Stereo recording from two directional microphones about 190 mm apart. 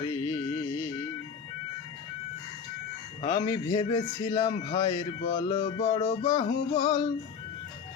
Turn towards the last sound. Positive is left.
turn(degrees=30)  # may be behind; listen again after turning